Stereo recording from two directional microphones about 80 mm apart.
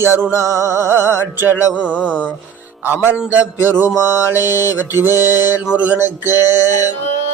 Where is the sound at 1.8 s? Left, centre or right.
Centre.